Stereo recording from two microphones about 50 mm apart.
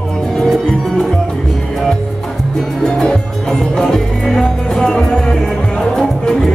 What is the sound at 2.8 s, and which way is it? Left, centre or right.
Music, centre.